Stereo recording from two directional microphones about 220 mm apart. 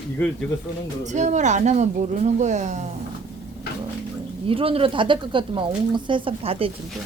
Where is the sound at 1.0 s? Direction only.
35° right (ahead or behind).